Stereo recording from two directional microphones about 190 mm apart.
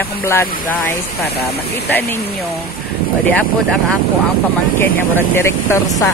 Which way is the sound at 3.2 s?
10° left (ahead or behind).